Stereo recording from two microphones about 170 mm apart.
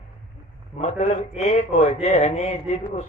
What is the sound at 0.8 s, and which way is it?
Speech, 40° left (ahead or behind).